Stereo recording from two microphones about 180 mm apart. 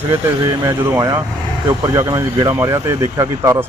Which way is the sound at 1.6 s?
15° right (ahead or behind).